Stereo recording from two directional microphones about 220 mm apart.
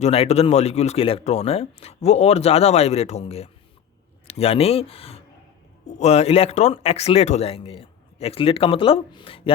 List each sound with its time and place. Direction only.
0.0 s speech: 30° left (ahead or behind)